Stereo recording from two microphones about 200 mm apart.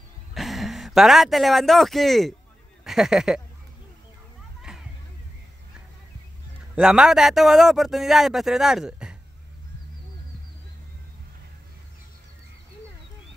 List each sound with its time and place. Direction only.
0.3 s a man's voice: centre (ahead or behind)
4.6 s music: centre (ahead or behind)
6.7 s a man's voice: 5° right (ahead or behind)